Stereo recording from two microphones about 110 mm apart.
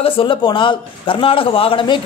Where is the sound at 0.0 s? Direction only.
55° left (ahead or behind).